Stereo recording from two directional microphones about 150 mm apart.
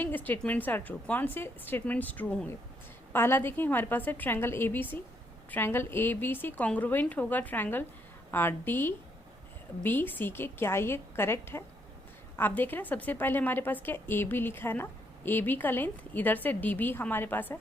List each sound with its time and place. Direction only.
0.0 s a woman's voice: 10° left (ahead or behind)